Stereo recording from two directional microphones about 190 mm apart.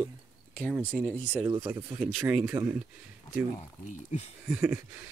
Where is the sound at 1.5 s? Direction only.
20° right (ahead or behind).